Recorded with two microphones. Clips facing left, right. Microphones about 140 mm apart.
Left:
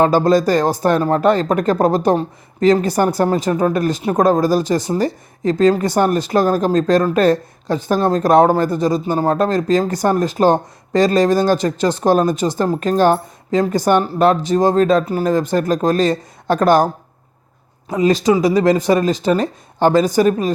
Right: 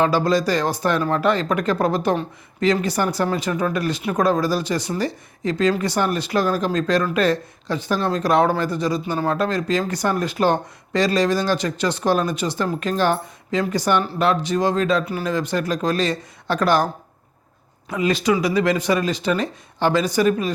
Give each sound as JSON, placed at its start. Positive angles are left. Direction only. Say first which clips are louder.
{"t": 0.0, "sound": "speech", "louder": "left 5 dB", "side_deg": 45}